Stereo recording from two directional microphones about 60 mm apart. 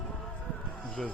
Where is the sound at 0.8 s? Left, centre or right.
Centre.